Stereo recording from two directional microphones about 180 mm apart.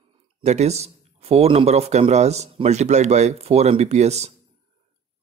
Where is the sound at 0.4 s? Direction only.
35° right (ahead or behind).